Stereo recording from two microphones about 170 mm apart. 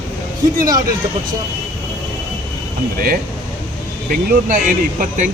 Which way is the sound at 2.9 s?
60° right (ahead or behind).